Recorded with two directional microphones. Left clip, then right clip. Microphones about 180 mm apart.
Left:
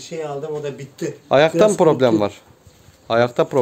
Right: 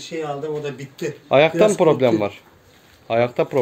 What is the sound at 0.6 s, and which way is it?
Speech, 60° left (ahead or behind).